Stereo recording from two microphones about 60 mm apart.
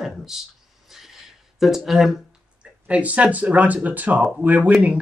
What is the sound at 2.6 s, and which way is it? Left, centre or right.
Speech, right.